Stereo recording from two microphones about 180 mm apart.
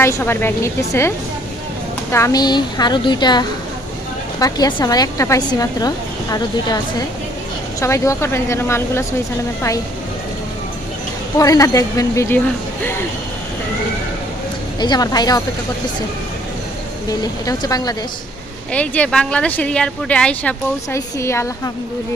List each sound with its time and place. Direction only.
0.0 s speech: 15° left (ahead or behind)
2.1 s speech: 20° left (ahead or behind)
7.8 s speech: 15° left (ahead or behind)
11.3 s speech: 20° left (ahead or behind)
14.8 s speech: 25° left (ahead or behind)
17.1 s speech: 20° left (ahead or behind)
18.7 s speech: 5° left (ahead or behind)